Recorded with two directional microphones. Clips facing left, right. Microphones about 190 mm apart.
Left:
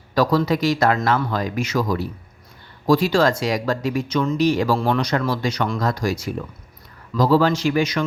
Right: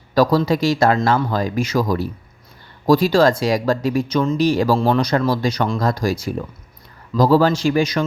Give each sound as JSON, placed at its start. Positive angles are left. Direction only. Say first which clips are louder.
{"t": 0.1, "sound": "speech", "louder": "right 3 dB", "side_deg": -35}